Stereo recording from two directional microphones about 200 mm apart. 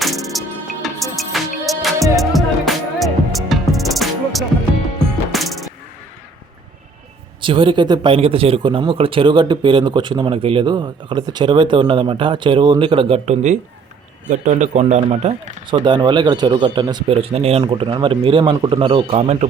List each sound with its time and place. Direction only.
0.0 s music: centre (ahead or behind)
7.4 s a man's voice: 25° right (ahead or behind)